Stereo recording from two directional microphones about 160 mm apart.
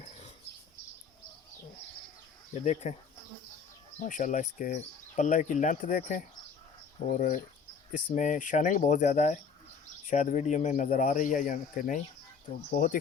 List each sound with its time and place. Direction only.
2.8 s speech: 50° left (ahead or behind)
4.0 s speech: 50° left (ahead or behind)